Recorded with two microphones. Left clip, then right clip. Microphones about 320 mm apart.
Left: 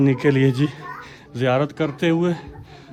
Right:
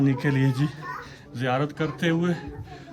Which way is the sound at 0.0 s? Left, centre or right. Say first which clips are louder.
Left 7 dB; centre.